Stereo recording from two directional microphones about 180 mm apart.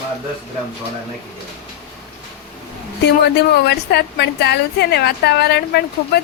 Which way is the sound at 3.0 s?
65° left (ahead or behind).